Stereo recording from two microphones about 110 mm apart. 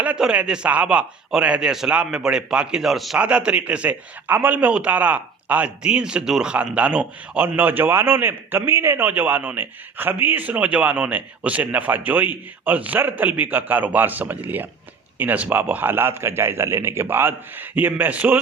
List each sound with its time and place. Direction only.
0.0 s a man's voice: 10° right (ahead or behind)